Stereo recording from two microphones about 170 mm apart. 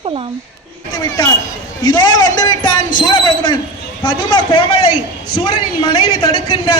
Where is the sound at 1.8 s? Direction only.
25° left (ahead or behind).